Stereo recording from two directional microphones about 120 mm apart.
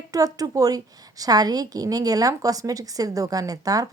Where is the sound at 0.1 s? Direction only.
30° right (ahead or behind).